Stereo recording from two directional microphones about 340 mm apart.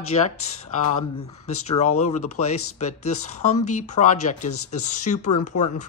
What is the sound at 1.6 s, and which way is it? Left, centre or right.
Speech, centre.